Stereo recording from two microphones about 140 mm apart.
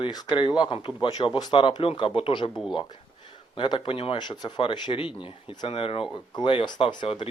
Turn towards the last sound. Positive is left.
turn(degrees=40)  # may be behind; listen again after turning